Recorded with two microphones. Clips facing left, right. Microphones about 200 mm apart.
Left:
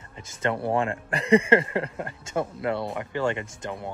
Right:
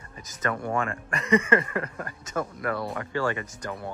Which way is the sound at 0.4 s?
30° left (ahead or behind).